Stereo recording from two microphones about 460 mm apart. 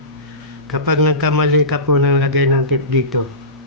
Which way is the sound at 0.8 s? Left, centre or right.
Right.